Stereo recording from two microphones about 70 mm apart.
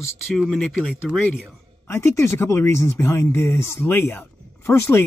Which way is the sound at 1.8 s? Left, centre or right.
Left.